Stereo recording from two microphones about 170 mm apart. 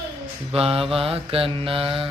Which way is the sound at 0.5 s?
35° right (ahead or behind).